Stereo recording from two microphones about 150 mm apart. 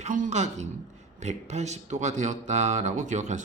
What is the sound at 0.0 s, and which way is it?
Speech, 55° right (ahead or behind).